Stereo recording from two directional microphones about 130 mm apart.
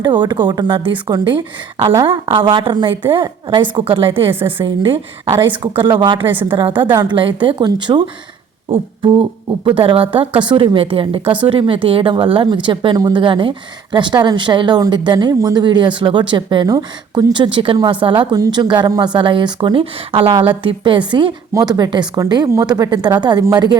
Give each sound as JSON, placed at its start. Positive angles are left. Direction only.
{"t": 0.0, "sound": "speech", "side_deg": -35}
{"t": 8.7, "sound": "a sound", "side_deg": -40}
{"t": 9.6, "sound": "a woman's voice", "side_deg": -45}